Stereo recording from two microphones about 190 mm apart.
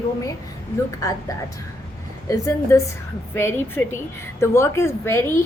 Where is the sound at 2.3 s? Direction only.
15° left (ahead or behind).